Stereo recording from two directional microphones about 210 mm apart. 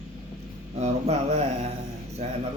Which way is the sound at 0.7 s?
30° right (ahead or behind).